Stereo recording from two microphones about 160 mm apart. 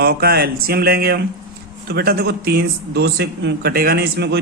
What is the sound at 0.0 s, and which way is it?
Speech, 80° right.